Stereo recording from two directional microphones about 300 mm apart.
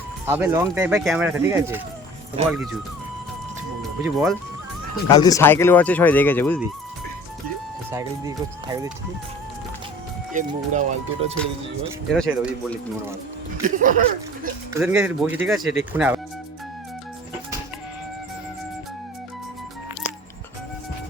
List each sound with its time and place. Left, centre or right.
0.3 s speech: centre
2.4 s speech: right
4.0 s speech: centre
5.0 s speech: centre
7.9 s speech: centre
10.3 s speech: right
12.1 s speech: centre
13.6 s speech: right
14.7 s speech: centre